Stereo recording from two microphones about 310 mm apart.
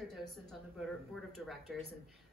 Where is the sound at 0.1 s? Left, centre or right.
Centre.